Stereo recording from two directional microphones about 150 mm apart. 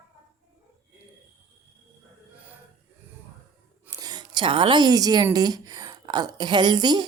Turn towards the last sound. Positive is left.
turn(degrees=-30)  # may be behind; listen again after turning